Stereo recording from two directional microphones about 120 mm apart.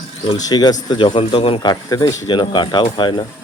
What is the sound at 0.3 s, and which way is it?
Speech, 35° left (ahead or behind).